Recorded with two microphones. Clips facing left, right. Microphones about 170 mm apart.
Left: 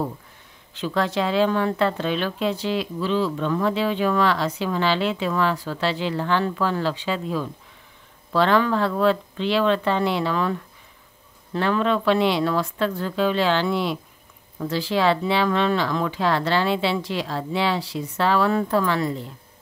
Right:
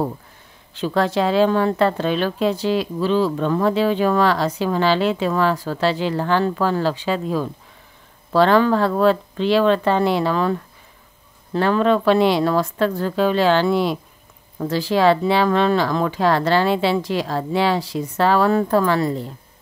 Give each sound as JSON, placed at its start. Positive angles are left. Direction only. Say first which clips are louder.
{"t": 0.7, "sound": "speech", "louder": "right 4 dB", "side_deg": -40}